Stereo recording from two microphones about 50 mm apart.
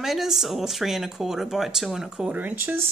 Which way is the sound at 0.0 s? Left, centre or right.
Centre.